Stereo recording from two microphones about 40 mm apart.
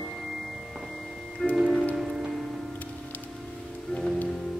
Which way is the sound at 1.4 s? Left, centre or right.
Centre.